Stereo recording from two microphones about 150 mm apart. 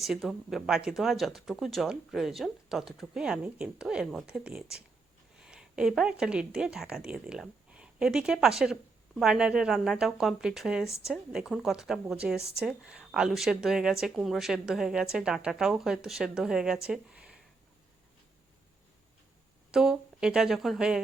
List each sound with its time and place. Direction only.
0.0 s speech: centre (ahead or behind)
19.7 s speech: 5° right (ahead or behind)